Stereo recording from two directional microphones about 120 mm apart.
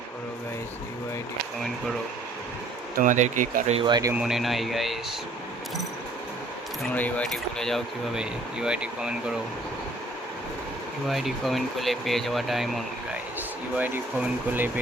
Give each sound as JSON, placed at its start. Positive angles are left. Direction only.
{"t": 3.0, "sound": "speech", "side_deg": -90}
{"t": 3.8, "sound": "speech", "side_deg": -35}
{"t": 4.1, "sound": "speech", "side_deg": -5}
{"t": 6.9, "sound": "speech", "side_deg": 15}
{"t": 7.3, "sound": "speech", "side_deg": 5}
{"t": 11.1, "sound": "speech", "side_deg": 0}
{"t": 13.7, "sound": "speech", "side_deg": -15}